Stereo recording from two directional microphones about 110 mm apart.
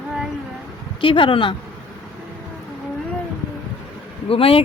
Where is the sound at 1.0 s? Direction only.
50° left (ahead or behind).